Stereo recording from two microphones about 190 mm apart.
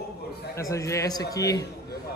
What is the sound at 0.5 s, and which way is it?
Speech, 15° left (ahead or behind).